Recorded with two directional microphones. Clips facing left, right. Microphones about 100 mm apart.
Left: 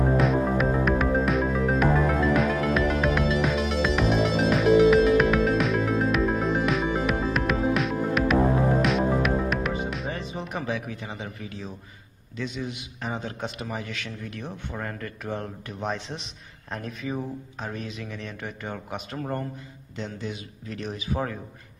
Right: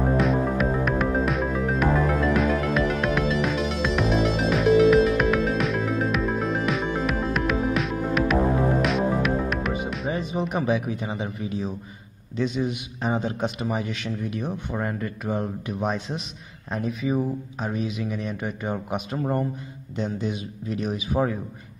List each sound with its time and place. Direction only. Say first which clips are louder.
0.2 s music: even; centre (ahead or behind)
10.5 s a man's voice: right 5 dB; 20° right (ahead or behind)